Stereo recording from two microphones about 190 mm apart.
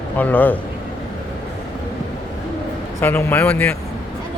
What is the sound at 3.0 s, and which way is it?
Speech, 10° left (ahead or behind).